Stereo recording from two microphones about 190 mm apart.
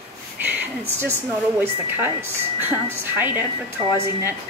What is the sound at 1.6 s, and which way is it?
Speech, 10° right (ahead or behind).